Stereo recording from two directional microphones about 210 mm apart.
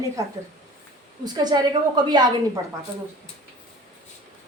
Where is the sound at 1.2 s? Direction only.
20° right (ahead or behind).